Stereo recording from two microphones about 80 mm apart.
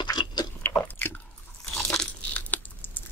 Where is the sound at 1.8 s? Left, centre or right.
Centre.